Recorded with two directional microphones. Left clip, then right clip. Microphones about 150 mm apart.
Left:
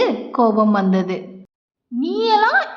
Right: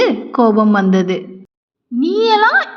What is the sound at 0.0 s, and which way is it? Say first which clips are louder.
A woman's voice: right 3 dB; 15° right (ahead or behind).